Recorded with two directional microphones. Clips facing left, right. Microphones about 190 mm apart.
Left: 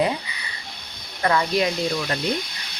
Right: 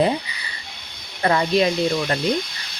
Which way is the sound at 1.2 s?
30° right (ahead or behind).